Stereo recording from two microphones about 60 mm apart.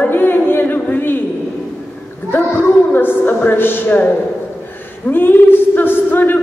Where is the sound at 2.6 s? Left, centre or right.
Left.